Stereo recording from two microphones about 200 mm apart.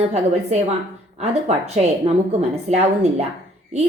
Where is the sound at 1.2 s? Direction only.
35° right (ahead or behind).